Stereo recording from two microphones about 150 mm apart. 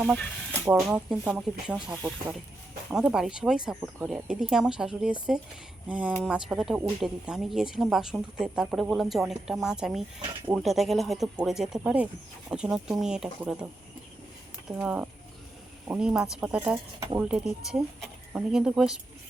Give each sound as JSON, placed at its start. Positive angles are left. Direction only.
{"t": 0.6, "sound": "speech", "side_deg": -5}
{"t": 14.8, "sound": "speech", "side_deg": -5}
{"t": 16.7, "sound": "speech", "side_deg": -30}
{"t": 17.2, "sound": "speech", "side_deg": -5}